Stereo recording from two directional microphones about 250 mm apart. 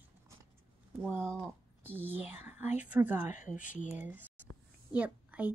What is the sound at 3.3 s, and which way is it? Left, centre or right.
Speech, left.